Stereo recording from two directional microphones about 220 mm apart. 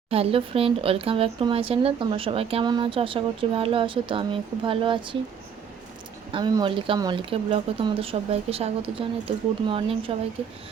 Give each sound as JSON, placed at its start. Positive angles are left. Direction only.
{"t": 0.1, "sound": "speech", "side_deg": -25}
{"t": 6.3, "sound": "speech", "side_deg": -20}